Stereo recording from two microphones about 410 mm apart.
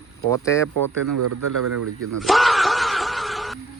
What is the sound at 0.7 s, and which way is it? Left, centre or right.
Speech, right.